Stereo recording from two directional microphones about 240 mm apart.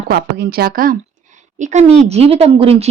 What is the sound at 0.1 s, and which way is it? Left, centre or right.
A woman's voice, right.